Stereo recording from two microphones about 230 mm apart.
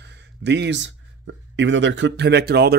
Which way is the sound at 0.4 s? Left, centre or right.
Right.